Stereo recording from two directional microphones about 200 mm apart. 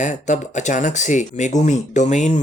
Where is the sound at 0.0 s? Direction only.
40° left (ahead or behind).